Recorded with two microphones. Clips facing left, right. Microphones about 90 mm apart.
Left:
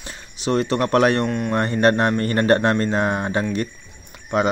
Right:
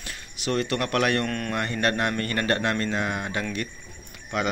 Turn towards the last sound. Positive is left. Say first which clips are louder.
# left 7 dB
turn(degrees=35)  # may be behind; listen again after turning